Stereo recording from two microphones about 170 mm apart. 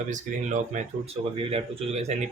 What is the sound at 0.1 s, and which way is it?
Speech, 45° right (ahead or behind).